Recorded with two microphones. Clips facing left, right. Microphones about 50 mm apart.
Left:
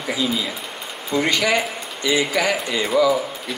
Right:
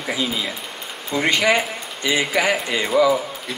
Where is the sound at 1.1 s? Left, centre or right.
Right.